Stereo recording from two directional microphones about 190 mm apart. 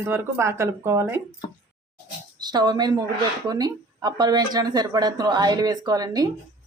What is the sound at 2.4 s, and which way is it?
A woman's voice, 20° right (ahead or behind).